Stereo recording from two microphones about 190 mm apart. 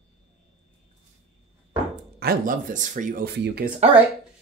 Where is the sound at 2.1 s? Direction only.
50° right (ahead or behind).